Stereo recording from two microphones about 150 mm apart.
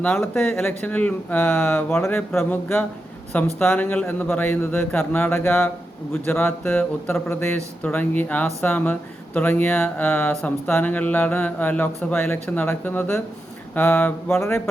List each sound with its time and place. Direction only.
0.5 s speech: 10° left (ahead or behind)